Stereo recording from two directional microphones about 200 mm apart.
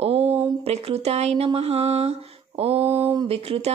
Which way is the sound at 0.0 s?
30° right (ahead or behind).